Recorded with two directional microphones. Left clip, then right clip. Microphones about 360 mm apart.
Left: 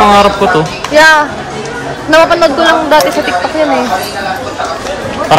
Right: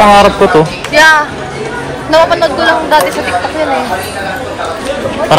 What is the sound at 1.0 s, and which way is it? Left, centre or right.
Speech, centre.